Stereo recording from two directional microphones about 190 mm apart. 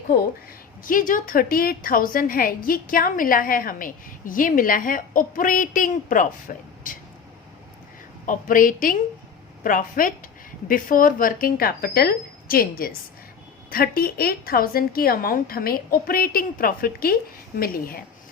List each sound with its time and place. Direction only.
0.9 s a woman's voice: 45° left (ahead or behind)
8.3 s a woman's voice: 45° left (ahead or behind)